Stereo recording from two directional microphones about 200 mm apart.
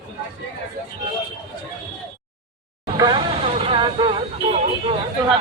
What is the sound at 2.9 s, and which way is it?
Vehicle, 25° right (ahead or behind).